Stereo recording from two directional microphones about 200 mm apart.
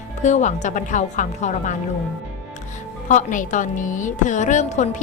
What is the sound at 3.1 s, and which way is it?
A woman's voice, 40° left (ahead or behind).